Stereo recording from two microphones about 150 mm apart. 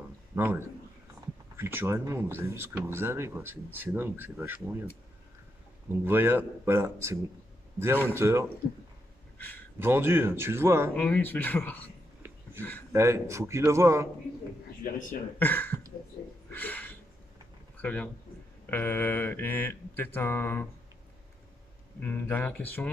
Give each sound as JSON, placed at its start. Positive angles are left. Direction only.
{"t": 0.3, "sound": "speech", "side_deg": -15}
{"t": 1.6, "sound": "speech", "side_deg": -15}
{"t": 6.0, "sound": "speech", "side_deg": -15}
{"t": 9.8, "sound": "speech", "side_deg": -15}
{"t": 11.0, "sound": "mantra", "side_deg": 10}
{"t": 12.9, "sound": "a man's voice", "side_deg": -20}
{"t": 15.3, "sound": "speech", "side_deg": 15}
{"t": 16.4, "sound": "a sound", "side_deg": 10}
{"t": 17.8, "sound": "mantra", "side_deg": 10}
{"t": 22.0, "sound": "mantra", "side_deg": 10}